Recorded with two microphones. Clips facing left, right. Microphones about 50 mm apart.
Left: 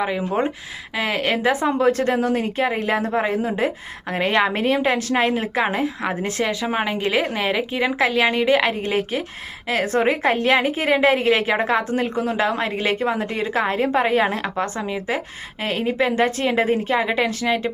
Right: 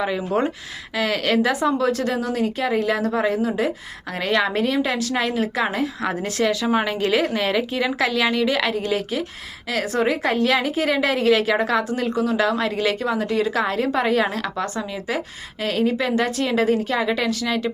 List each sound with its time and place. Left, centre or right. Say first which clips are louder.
0.3 s a woman's voice: even; centre